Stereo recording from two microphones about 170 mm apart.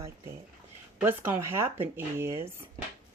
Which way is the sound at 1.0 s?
15° right (ahead or behind).